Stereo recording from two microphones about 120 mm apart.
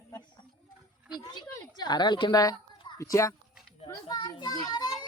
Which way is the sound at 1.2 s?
35° left (ahead or behind).